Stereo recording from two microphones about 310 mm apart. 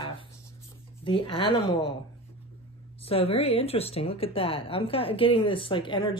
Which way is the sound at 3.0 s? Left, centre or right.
Centre.